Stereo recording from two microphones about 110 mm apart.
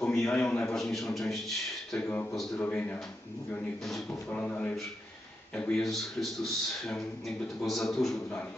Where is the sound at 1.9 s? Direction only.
15° left (ahead or behind).